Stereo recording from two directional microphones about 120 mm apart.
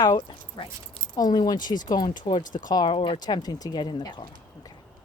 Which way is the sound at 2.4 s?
90° left.